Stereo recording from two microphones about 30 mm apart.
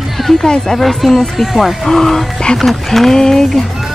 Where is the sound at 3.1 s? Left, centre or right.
Centre.